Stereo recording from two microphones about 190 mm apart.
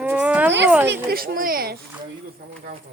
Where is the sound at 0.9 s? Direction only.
50° right (ahead or behind).